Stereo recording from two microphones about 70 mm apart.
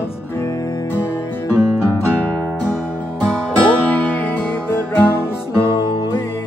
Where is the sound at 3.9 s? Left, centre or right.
Left.